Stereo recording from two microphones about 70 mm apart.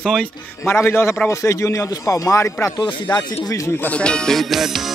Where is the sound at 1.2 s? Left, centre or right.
Left.